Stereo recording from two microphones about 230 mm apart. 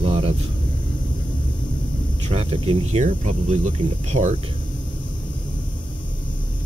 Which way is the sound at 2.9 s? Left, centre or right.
Right.